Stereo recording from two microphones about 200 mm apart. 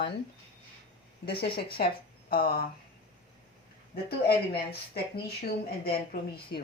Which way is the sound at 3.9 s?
50° left (ahead or behind).